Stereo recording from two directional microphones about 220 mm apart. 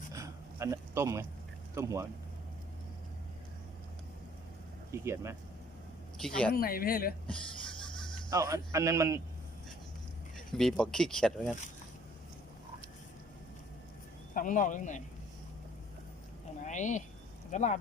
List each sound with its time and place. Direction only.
0.1 s a sound: 15° right (ahead or behind)
1.7 s a man's voice: 15° right (ahead or behind)
4.9 s a man's voice: 10° right (ahead or behind)
6.2 s speech: 5° left (ahead or behind)
6.5 s speech: 40° left (ahead or behind)
8.3 s a man's voice: 15° right (ahead or behind)
10.3 s speech: centre (ahead or behind)
14.3 s speech: 35° left (ahead or behind)
16.6 s speech: 35° left (ahead or behind)